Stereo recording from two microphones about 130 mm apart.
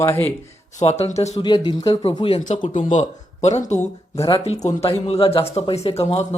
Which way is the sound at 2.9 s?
60° left (ahead or behind).